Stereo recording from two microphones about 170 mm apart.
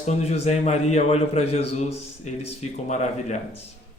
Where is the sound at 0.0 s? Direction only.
40° left (ahead or behind).